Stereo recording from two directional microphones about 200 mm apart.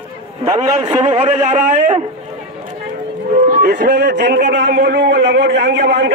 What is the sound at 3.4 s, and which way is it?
A man's voice, 45° right (ahead or behind).